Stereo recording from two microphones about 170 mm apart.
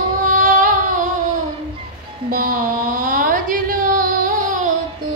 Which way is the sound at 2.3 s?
55° right (ahead or behind).